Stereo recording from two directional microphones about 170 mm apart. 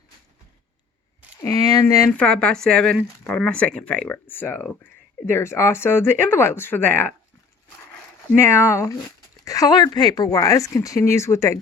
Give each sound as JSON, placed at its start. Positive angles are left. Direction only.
{"t": 1.4, "sound": "speech", "side_deg": 20}
{"t": 2.0, "sound": "speech", "side_deg": 5}
{"t": 8.4, "sound": "speech", "side_deg": 15}